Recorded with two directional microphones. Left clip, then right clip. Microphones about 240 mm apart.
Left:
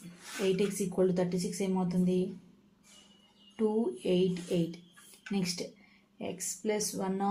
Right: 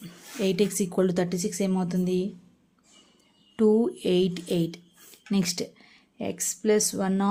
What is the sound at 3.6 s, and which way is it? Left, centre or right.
Speech, right.